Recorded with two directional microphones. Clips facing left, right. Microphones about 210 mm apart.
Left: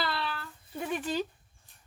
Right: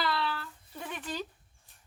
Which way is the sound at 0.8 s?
10° left (ahead or behind).